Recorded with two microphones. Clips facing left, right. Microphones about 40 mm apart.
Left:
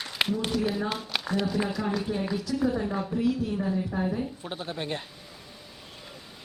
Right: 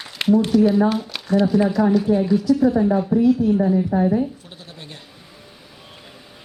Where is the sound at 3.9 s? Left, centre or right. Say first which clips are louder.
Right 11 dB; centre.